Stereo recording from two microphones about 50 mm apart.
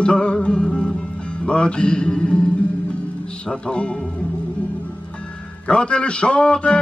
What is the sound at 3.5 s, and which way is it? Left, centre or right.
Speech, centre.